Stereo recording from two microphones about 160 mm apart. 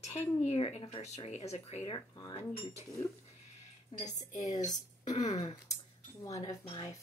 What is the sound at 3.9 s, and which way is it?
Speech, 30° left (ahead or behind).